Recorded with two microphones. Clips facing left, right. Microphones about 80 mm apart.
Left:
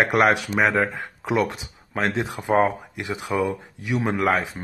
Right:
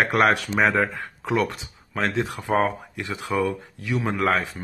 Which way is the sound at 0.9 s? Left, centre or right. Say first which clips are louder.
Left 1 dB; centre.